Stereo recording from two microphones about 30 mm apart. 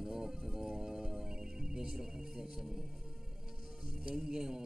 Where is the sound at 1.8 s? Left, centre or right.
Centre.